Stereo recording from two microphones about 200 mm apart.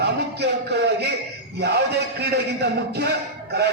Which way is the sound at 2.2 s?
55° right (ahead or behind).